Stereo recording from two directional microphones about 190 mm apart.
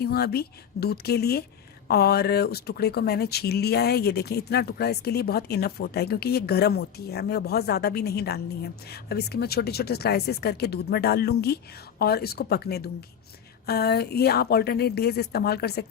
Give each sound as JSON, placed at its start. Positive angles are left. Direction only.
{"t": 0.0, "sound": "speech", "side_deg": 55}